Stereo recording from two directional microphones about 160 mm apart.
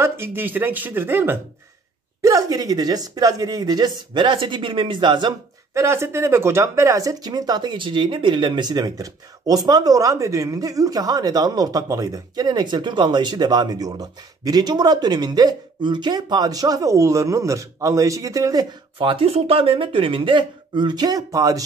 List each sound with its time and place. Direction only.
0.0 s speech: 15° right (ahead or behind)
5.8 s speech: 15° right (ahead or behind)